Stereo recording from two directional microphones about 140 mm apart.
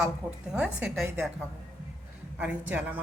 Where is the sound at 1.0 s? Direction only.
15° right (ahead or behind).